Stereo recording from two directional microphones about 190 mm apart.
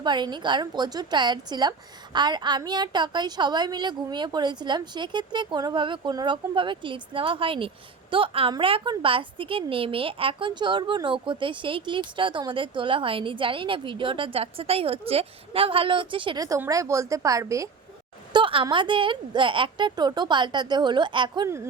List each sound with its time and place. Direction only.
0.0 s a woman's voice: 25° right (ahead or behind)